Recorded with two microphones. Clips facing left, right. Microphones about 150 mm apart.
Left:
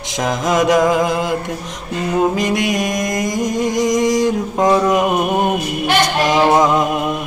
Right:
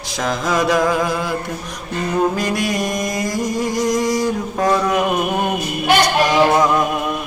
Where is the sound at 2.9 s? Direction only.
90° left.